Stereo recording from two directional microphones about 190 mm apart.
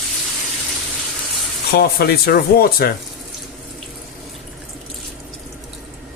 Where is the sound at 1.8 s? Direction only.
55° left (ahead or behind).